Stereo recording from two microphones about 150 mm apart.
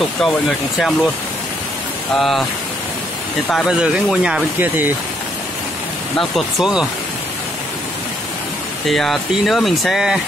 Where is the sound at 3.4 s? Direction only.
5° left (ahead or behind).